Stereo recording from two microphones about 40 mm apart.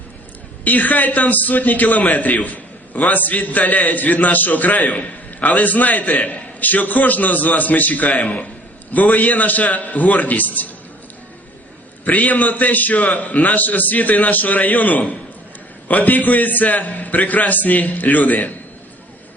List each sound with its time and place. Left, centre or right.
0.6 s a man's voice: left
12.0 s a man's voice: left